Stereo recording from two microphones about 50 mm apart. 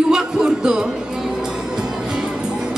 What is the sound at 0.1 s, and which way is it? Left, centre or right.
Music, centre.